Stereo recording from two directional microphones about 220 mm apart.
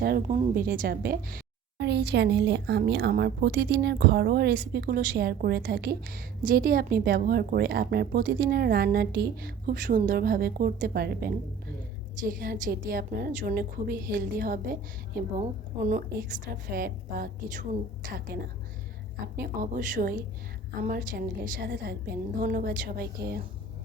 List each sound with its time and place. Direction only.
0.0 s a woman's voice: 45° right (ahead or behind)
15.9 s a woman's voice: 40° right (ahead or behind)
19.2 s a woman's voice: 40° right (ahead or behind)